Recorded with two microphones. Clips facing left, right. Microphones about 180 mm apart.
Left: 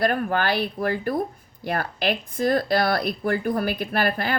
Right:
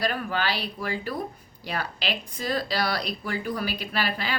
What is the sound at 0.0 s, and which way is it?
A woman's voice, 50° left (ahead or behind).